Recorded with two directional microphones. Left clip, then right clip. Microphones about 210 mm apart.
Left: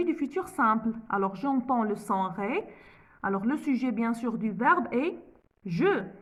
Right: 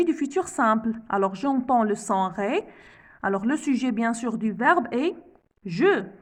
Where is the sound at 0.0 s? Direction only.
40° right (ahead or behind).